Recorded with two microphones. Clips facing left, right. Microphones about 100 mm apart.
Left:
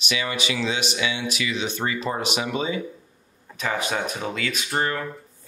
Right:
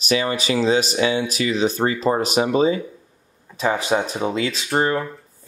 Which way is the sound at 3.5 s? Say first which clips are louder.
Right 6 dB; 25° right (ahead or behind).